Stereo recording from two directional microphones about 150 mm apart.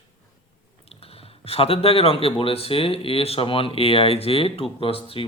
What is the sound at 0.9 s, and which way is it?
A man's voice, 40° left (ahead or behind).